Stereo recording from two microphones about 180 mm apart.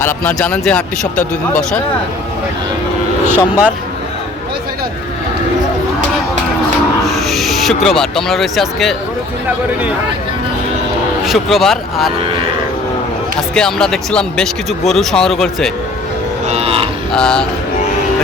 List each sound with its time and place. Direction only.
0.0 s speech: 10° left (ahead or behind)
3.2 s speech: 10° right (ahead or behind)
7.0 s speech: centre (ahead or behind)
11.3 s speech: centre (ahead or behind)
13.5 s speech: 5° left (ahead or behind)
16.5 s livestock: 35° right (ahead or behind)
17.1 s speech: 5° left (ahead or behind)